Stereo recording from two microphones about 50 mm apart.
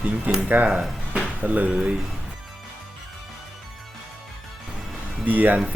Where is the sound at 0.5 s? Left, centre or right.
Right.